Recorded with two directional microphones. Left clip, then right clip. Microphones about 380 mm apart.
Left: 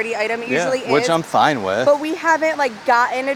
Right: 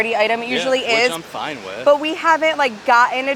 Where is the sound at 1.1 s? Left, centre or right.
Left.